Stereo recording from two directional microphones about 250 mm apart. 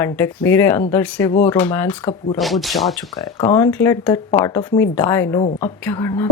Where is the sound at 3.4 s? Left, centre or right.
Centre.